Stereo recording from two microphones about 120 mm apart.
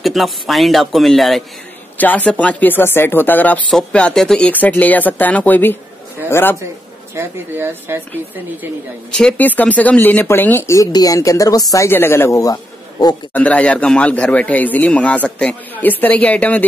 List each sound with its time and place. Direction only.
0.0 s speech: centre (ahead or behind)
2.0 s a man's voice: 15° left (ahead or behind)
7.2 s speech: 20° right (ahead or behind)
9.1 s a man's voice: 10° left (ahead or behind)
10.8 s speech: 30° left (ahead or behind)
13.3 s a man's voice: 10° left (ahead or behind)